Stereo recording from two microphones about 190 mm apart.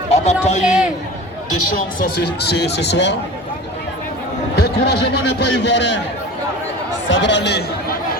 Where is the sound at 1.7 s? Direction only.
50° left (ahead or behind).